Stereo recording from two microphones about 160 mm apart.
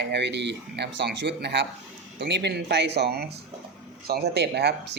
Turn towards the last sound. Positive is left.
turn(degrees=-90)